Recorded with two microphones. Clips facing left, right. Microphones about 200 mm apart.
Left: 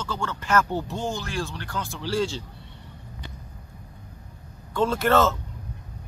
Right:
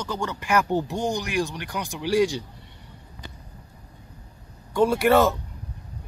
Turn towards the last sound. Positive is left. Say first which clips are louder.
# right 2 dB
turn(degrees=-15)  # may be behind; listen again after turning